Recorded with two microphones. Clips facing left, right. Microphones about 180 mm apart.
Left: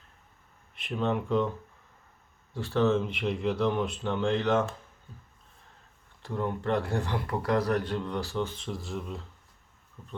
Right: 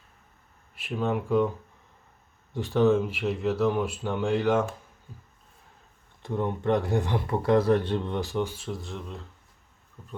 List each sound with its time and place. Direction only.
0.8 s speech: 5° right (ahead or behind)
2.5 s speech: 15° right (ahead or behind)
6.2 s speech: 20° right (ahead or behind); by 9.2 s centre (ahead or behind)
10.0 s a sound: centre (ahead or behind)